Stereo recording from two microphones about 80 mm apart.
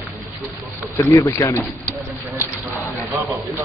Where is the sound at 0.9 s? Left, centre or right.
Left.